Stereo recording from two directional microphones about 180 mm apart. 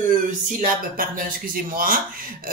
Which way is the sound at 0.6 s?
50° right (ahead or behind).